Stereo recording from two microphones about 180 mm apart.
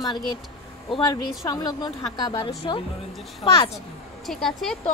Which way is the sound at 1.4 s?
20° left (ahead or behind).